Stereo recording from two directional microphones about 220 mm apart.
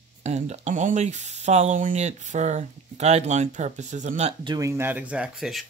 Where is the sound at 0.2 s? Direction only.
30° right (ahead or behind).